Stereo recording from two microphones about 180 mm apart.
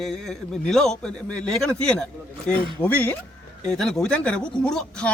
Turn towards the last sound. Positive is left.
turn(degrees=5)  # may be behind; listen again after turning